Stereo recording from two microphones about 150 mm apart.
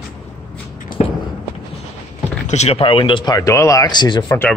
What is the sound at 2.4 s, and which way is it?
Speech, 45° left (ahead or behind).